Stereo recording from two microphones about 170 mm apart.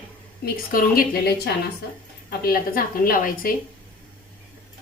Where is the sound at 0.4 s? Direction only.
55° left (ahead or behind).